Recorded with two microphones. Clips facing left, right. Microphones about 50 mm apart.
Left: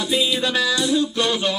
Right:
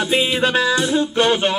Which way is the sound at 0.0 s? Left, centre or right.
Right.